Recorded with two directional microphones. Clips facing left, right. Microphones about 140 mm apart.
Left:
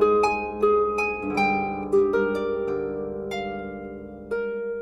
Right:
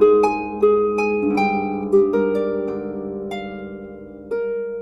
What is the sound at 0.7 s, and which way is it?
Harp, 5° right (ahead or behind).